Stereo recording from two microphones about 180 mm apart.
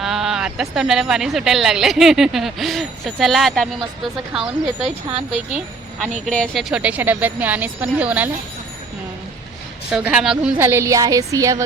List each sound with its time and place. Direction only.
0.0 s speech: centre (ahead or behind)
6.2 s a woman's voice: 5° left (ahead or behind)
9.9 s a woman's voice: 5° right (ahead or behind)